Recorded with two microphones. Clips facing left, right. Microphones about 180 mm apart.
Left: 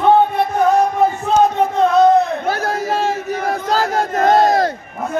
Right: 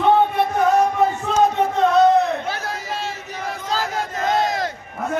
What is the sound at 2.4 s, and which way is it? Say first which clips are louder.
Battle cry: left 8 dB; 45° left (ahead or behind).